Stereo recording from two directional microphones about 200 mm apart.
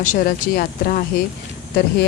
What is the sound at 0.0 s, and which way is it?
Speech, 45° left (ahead or behind).